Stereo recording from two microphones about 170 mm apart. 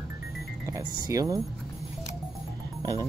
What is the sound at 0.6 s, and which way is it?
Speech, 20° right (ahead or behind).